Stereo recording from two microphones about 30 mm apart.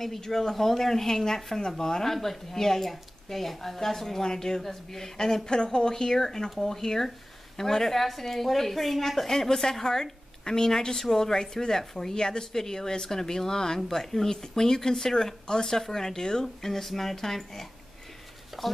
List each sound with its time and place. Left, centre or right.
0.0 s a woman's voice: centre
16.6 s a woman's voice: centre
18.6 s speech: centre